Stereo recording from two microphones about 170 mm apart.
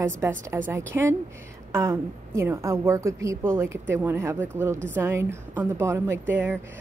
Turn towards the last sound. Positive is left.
turn(degrees=-10)  # may be behind; listen again after turning